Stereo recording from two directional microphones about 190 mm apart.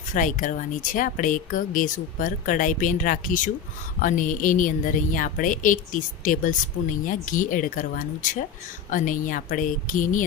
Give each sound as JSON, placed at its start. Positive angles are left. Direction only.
{"t": 0.1, "sound": "speech", "side_deg": 45}